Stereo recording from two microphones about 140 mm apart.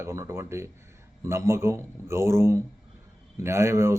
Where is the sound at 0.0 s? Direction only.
20° right (ahead or behind).